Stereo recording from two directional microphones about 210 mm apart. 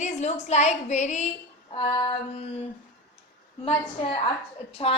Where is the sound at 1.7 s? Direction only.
25° left (ahead or behind).